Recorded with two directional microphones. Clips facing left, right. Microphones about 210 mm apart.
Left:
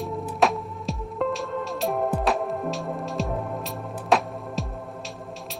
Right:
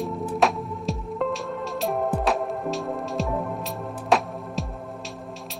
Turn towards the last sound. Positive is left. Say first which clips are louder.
# even
turn(degrees=0)  # may be behind; listen again after turning